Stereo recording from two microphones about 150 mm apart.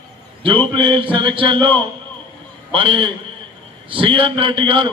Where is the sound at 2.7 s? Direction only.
35° right (ahead or behind).